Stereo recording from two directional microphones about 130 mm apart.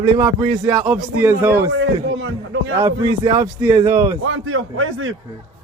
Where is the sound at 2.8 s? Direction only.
35° right (ahead or behind).